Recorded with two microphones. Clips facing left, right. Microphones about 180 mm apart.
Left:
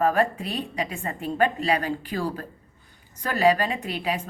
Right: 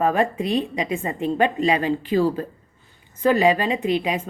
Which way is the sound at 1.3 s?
20° right (ahead or behind).